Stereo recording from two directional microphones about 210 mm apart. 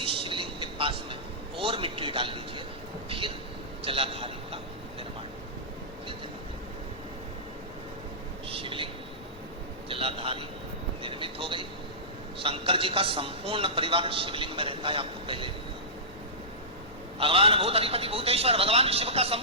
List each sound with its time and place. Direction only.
0.0 s vehicle: 25° right (ahead or behind)
1.5 s a man's voice: 25° right (ahead or behind)
8.4 s a sound: 25° right (ahead or behind)
9.9 s a sound: 25° right (ahead or behind)
11.0 s vehicle: 25° right (ahead or behind)
12.4 s a man's voice: 25° right (ahead or behind)
17.2 s a man's voice: 25° right (ahead or behind)